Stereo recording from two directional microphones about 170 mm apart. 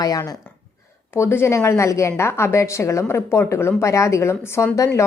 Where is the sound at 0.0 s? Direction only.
20° left (ahead or behind).